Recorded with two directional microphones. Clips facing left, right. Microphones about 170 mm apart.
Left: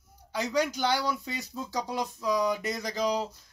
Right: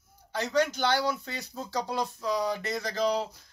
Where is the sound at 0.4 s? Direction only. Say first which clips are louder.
Right 1 dB; 10° left (ahead or behind).